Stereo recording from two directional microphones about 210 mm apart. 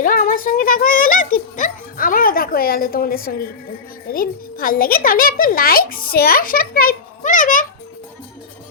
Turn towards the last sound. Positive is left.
turn(degrees=40)  # may be behind; listen again after turning